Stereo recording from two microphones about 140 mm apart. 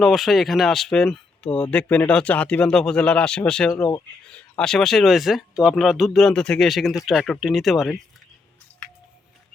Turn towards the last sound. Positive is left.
turn(degrees=0)  # may be behind; listen again after turning